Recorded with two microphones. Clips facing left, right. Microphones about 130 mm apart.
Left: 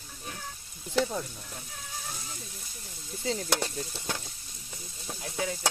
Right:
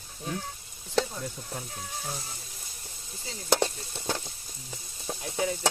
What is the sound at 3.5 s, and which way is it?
Sizzle, 25° right (ahead or behind).